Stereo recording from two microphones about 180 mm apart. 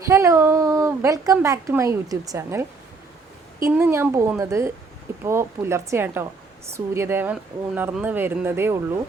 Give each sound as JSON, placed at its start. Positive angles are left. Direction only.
{"t": 0.0, "sound": "a woman's voice", "side_deg": -15}